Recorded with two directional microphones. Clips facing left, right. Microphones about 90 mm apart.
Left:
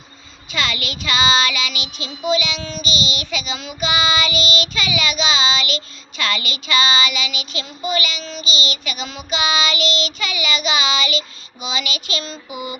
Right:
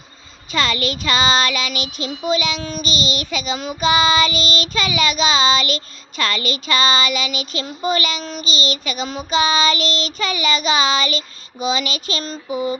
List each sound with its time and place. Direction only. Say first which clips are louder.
0.5 s child singing: right 4 dB; 40° right (ahead or behind)